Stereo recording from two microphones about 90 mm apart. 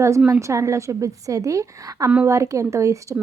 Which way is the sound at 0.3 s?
35° right (ahead or behind).